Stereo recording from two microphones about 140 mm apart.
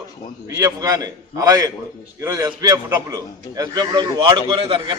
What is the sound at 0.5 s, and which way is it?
A man's voice, 25° right (ahead or behind).